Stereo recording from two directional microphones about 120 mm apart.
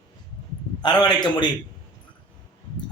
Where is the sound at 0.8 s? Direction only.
35° left (ahead or behind).